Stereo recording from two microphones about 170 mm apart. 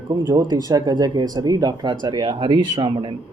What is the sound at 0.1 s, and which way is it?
Speech, 20° right (ahead or behind).